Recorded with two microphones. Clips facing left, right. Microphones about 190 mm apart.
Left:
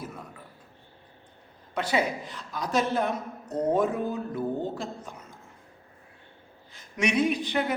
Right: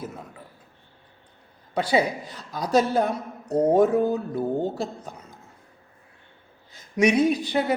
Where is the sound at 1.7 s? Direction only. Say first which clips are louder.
Right 4 dB; 35° right (ahead or behind).